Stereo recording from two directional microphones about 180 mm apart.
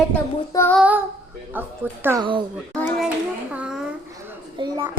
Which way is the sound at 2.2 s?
25° right (ahead or behind).